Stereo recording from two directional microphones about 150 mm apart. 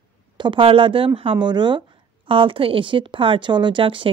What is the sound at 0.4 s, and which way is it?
Speech, 35° right (ahead or behind).